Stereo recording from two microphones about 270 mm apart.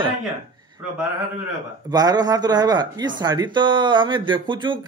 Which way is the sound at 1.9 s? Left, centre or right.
Centre.